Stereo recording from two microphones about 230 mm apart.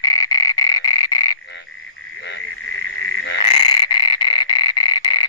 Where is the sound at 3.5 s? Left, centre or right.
Left.